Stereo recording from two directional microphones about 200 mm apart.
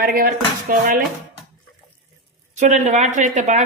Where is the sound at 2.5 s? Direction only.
35° right (ahead or behind).